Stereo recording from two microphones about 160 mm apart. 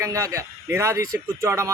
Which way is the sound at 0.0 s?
20° right (ahead or behind).